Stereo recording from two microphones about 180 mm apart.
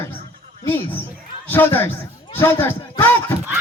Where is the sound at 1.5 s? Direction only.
10° left (ahead or behind).